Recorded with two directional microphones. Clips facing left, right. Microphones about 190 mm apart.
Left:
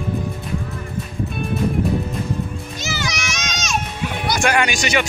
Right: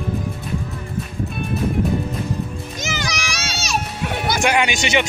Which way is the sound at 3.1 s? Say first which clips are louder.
Even; 35° right (ahead or behind).